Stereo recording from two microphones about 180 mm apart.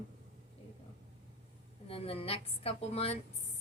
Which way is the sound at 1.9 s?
30° left (ahead or behind).